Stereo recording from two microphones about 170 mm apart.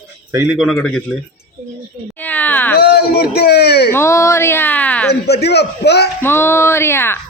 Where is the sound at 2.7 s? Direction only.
65° left (ahead or behind).